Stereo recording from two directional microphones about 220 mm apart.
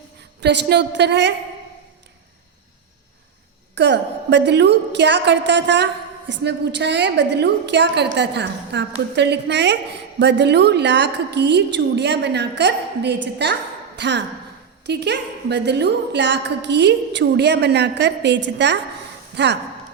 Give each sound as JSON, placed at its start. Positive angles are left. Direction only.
{"t": 0.4, "sound": "a woman's voice", "side_deg": -50}
{"t": 3.8, "sound": "a woman's voice", "side_deg": -55}